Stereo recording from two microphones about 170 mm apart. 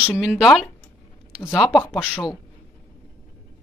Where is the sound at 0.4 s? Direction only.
Centre (ahead or behind).